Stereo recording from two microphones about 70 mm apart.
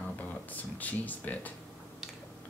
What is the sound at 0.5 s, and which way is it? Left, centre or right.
Speech, left.